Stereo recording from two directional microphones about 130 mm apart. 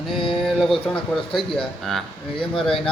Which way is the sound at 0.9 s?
Centre (ahead or behind).